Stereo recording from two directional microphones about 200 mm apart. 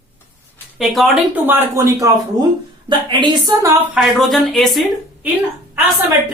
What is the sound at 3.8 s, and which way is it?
Speech, centre (ahead or behind).